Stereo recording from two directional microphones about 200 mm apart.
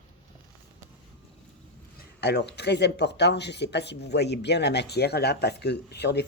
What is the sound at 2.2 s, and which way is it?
Speech, 55° left (ahead or behind).